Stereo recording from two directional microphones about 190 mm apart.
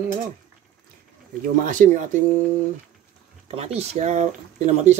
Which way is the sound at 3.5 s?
30° right (ahead or behind).